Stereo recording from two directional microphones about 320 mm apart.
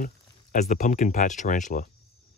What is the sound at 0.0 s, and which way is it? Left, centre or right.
Speech, left.